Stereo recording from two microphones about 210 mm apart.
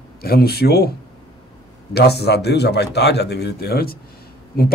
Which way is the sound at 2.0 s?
50° left (ahead or behind).